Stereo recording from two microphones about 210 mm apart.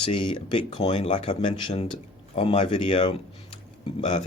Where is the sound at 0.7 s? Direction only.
30° left (ahead or behind).